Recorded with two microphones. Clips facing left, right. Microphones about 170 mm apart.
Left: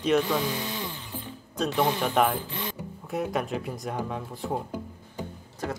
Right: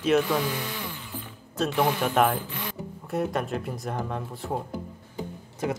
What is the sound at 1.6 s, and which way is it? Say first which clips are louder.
Speech: right 1 dB; 5° right (ahead or behind).